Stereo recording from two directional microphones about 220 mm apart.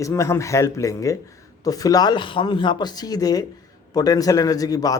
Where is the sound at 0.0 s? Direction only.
15° left (ahead or behind).